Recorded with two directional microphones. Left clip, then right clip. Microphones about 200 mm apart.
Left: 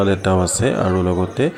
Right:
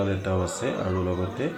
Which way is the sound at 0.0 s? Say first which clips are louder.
Left 10 dB; 50° left (ahead or behind).